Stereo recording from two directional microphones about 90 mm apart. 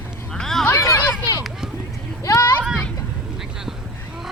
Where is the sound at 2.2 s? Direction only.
40° left (ahead or behind).